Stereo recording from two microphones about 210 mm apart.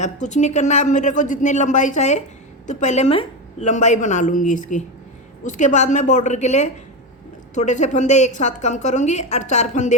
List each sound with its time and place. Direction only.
0.0 s a woman's voice: 35° left (ahead or behind)